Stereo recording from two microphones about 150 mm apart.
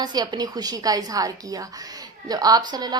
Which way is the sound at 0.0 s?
30° right (ahead or behind).